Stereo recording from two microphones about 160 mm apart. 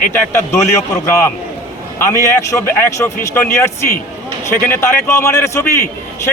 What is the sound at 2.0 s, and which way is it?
A man's voice, 20° left (ahead or behind).